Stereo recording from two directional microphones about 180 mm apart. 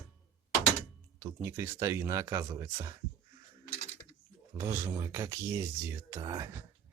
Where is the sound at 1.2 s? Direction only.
15° right (ahead or behind).